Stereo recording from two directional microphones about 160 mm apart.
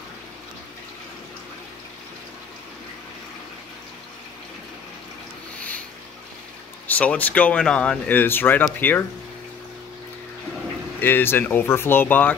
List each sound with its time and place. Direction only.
6.9 s speech: 10° left (ahead or behind)
11.0 s speech: 15° left (ahead or behind)